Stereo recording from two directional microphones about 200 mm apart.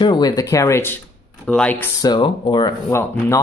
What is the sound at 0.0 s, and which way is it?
Speech, 20° left (ahead or behind).